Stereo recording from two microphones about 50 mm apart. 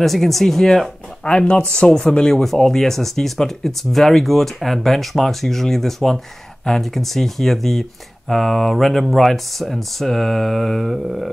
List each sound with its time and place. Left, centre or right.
0.0 s speech: centre
1.3 s speech: centre
2.3 s speech: centre